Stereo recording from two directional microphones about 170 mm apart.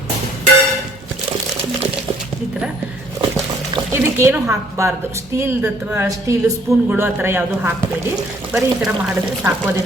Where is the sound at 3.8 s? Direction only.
15° right (ahead or behind).